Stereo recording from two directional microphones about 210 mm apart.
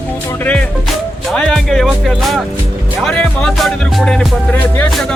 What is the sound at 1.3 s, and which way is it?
Music, 5° left (ahead or behind).